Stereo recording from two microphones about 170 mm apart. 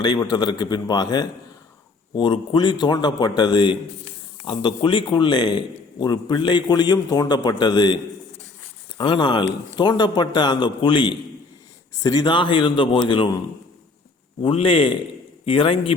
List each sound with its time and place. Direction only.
0.0 s a man's voice: 25° left (ahead or behind)
9.0 s a man's voice: 25° left (ahead or behind)
14.4 s a man's voice: 30° left (ahead or behind)